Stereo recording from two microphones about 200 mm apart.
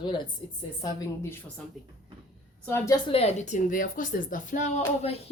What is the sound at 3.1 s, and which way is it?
Speech, 30° left (ahead or behind).